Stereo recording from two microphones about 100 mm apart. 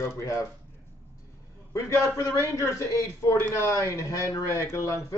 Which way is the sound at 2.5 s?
30° left (ahead or behind).